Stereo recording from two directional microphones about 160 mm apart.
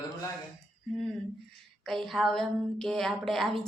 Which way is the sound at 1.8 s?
5° left (ahead or behind).